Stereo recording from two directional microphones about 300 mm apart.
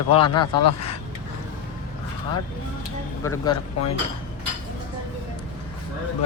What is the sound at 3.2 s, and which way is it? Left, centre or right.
Speech, centre.